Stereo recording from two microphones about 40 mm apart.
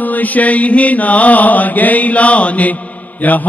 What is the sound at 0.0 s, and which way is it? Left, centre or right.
Mantra, left.